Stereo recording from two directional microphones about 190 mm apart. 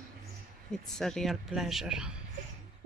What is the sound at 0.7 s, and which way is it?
Speech, 5° left (ahead or behind).